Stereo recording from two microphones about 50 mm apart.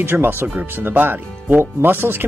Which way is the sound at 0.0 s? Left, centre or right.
Right.